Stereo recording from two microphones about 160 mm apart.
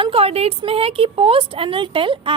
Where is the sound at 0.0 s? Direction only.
35° right (ahead or behind).